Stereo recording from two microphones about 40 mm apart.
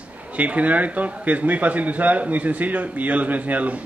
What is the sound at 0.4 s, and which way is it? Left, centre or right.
Speech, right.